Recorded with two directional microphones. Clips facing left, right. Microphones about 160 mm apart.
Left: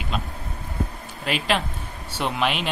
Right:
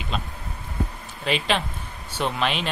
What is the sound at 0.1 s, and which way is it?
Speech, 5° left (ahead or behind).